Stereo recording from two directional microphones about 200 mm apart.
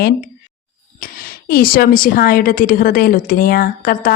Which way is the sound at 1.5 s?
50° left (ahead or behind).